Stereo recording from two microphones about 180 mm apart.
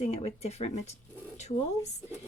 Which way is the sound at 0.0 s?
35° left (ahead or behind).